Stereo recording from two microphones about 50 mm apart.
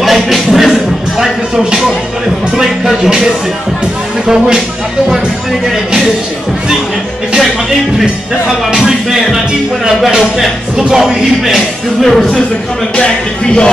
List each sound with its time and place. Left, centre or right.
0.0 s music: centre
1.6 s speech: centre
4.3 s speech: centre
8.8 s speech: centre
12.9 s speech: centre